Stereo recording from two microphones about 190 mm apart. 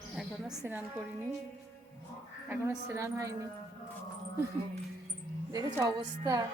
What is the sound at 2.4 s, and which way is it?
Speech, 10° right (ahead or behind).